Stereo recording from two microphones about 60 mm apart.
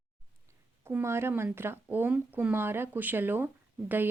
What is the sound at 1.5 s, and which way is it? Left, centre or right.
Mantra, right.